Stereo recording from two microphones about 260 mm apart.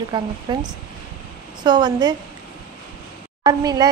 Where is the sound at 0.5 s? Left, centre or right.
Centre.